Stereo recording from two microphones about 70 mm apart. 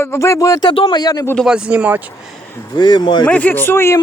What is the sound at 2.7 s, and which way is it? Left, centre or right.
Speech, left.